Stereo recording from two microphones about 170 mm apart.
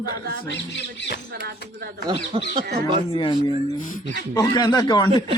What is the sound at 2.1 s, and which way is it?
Speech, 25° right (ahead or behind).